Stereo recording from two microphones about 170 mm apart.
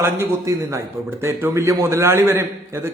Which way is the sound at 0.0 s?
15° right (ahead or behind).